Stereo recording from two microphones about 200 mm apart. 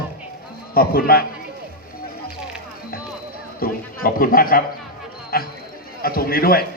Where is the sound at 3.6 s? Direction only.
45° left (ahead or behind).